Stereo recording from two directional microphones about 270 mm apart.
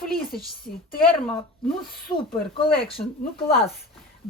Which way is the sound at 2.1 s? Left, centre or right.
Centre.